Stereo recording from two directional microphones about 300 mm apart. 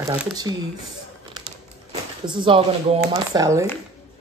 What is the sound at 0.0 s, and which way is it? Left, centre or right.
Speech, centre.